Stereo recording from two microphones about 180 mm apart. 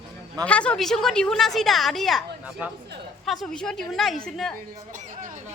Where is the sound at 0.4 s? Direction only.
5° left (ahead or behind).